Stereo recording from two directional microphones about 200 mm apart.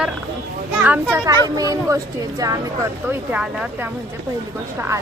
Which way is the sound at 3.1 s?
5° right (ahead or behind).